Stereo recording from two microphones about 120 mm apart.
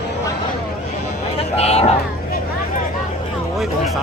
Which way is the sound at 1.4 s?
60° left (ahead or behind).